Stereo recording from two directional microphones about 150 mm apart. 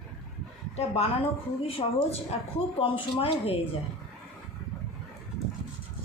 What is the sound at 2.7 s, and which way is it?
Speech, 40° left (ahead or behind).